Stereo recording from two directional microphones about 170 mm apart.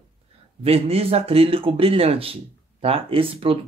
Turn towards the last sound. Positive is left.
turn(degrees=-35)  # may be behind; listen again after turning